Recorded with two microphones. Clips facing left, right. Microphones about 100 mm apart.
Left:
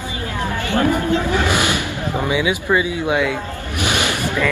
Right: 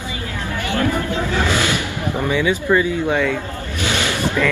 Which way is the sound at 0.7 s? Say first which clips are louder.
Left 3 dB; 20° left (ahead or behind).